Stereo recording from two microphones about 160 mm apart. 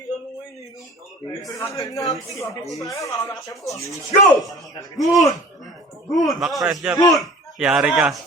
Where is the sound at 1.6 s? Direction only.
20° left (ahead or behind).